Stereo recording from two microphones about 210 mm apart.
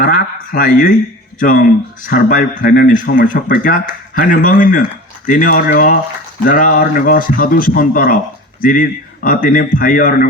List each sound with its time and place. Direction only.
0.0 s speech: 40° left (ahead or behind)